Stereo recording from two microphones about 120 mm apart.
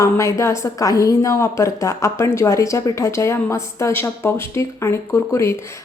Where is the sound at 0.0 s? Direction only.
25° left (ahead or behind).